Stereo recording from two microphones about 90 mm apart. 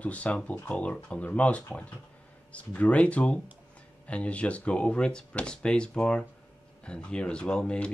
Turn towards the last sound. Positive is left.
turn(degrees=10)  # may be behind; listen again after turning